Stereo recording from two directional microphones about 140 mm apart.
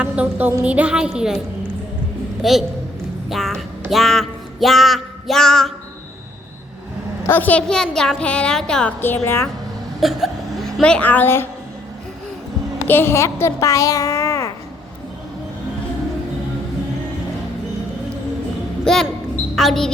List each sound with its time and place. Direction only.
0.0 s a woman's voice: 10° right (ahead or behind)
2.4 s a woman's voice: centre (ahead or behind)
3.2 s music: centre (ahead or behind)
7.3 s a woman's voice: 15° left (ahead or behind)
10.0 s a woman's voice: centre (ahead or behind); by 11.4 s 15° left (ahead or behind)
12.9 s a child's voice: 15° left (ahead or behind)
18.9 s a woman's voice: centre (ahead or behind)